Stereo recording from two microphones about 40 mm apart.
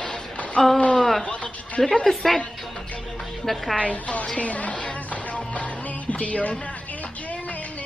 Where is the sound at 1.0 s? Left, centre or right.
Centre.